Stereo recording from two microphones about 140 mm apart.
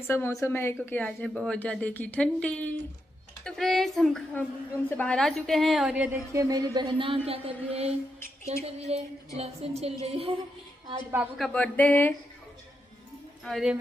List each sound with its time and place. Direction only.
0.0 s a woman's voice: 15° left (ahead or behind); by 6.0 s 5° right (ahead or behind)
6.3 s speech: 25° right (ahead or behind)
7.2 s a sound: 45° right (ahead or behind)
11.3 s a woman's voice: 5° left (ahead or behind)
13.4 s speech: centre (ahead or behind)